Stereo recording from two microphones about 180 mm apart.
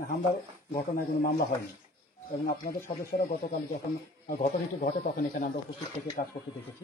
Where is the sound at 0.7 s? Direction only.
55° left (ahead or behind).